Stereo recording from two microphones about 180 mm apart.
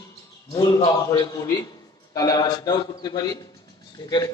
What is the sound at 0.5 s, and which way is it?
A man's voice, 20° left (ahead or behind).